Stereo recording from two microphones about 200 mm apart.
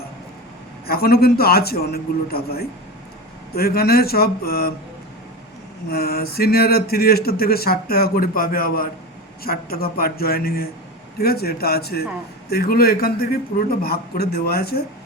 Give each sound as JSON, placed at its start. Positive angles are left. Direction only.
{"t": 0.9, "sound": "speech", "side_deg": 50}
{"t": 5.9, "sound": "speech", "side_deg": 50}